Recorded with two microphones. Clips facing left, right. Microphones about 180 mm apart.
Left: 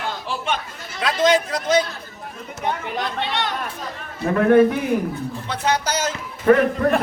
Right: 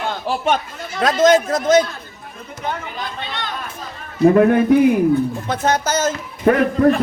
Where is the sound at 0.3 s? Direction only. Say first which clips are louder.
Right 9 dB; 45° right (ahead or behind).